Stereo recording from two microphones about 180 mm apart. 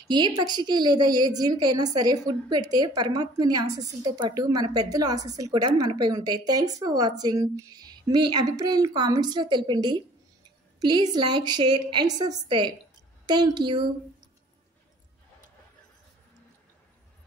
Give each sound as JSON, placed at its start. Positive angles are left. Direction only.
{"t": 0.1, "sound": "a woman's voice", "side_deg": -25}